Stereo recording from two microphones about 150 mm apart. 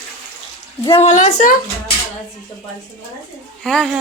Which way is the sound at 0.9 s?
45° left (ahead or behind).